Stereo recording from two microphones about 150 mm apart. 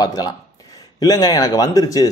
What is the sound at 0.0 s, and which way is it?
A man's voice, 25° left (ahead or behind).